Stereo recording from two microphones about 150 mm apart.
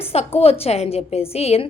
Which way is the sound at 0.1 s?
45° left (ahead or behind).